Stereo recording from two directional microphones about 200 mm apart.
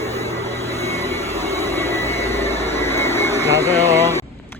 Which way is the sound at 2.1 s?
30° left (ahead or behind).